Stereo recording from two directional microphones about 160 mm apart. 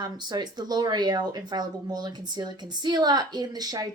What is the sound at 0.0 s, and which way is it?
Speech, 25° right (ahead or behind).